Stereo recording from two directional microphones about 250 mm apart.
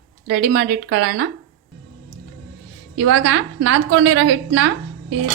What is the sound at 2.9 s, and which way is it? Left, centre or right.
A woman's voice, right.